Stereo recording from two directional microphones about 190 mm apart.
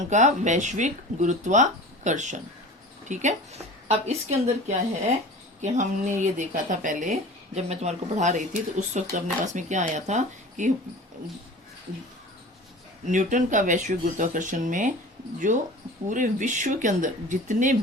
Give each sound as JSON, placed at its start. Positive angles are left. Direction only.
{"t": 0.1, "sound": "speech", "side_deg": -40}
{"t": 13.1, "sound": "speech", "side_deg": -40}